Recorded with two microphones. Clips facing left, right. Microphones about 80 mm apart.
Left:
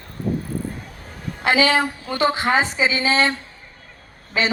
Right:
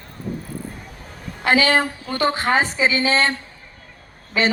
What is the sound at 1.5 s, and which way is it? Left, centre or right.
Speech, right.